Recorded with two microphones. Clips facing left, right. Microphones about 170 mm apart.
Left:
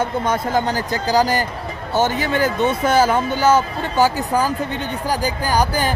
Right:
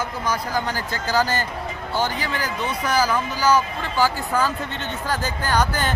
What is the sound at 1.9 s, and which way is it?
Speech, 20° left (ahead or behind).